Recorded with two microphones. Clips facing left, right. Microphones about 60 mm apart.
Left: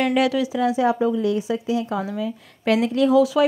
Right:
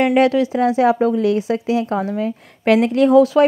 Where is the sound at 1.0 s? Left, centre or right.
Right.